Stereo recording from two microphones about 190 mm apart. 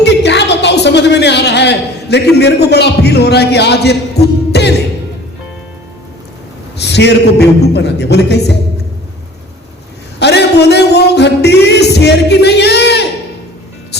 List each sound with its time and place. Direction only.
0.0 s music: 65° left (ahead or behind)
6.7 s a man's voice: 60° left (ahead or behind)
10.2 s music: 60° left (ahead or behind)